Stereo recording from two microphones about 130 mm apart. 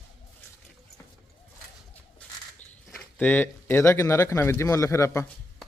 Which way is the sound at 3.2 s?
15° left (ahead or behind).